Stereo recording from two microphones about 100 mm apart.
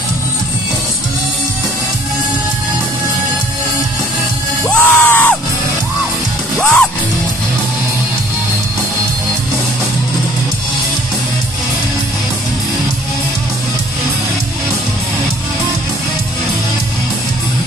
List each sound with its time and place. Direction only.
4.6 s music: 20° left (ahead or behind)
6.6 s music: 5° left (ahead or behind)